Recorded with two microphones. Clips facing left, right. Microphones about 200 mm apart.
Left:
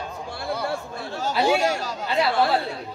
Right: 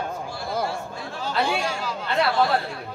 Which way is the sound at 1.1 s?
45° left (ahead or behind).